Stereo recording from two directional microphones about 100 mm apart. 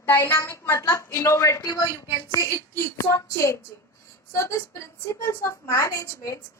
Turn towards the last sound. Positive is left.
turn(degrees=30)  # may be behind; listen again after turning